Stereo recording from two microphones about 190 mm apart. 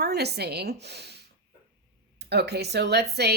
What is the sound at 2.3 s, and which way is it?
Speech, 60° right (ahead or behind).